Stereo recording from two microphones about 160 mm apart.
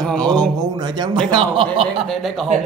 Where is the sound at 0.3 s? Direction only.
25° right (ahead or behind).